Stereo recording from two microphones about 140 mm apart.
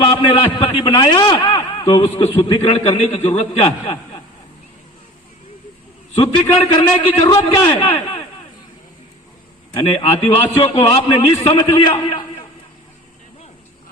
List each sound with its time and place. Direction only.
0.0 s a man's voice: 40° left (ahead or behind)
6.1 s a man's voice: 45° left (ahead or behind)
9.7 s a man's voice: 45° left (ahead or behind)